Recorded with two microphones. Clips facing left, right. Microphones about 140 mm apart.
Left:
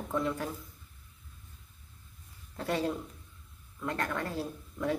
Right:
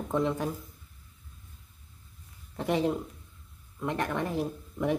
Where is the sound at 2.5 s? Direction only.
20° right (ahead or behind).